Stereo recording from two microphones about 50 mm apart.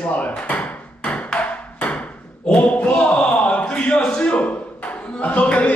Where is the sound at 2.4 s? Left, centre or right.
Left.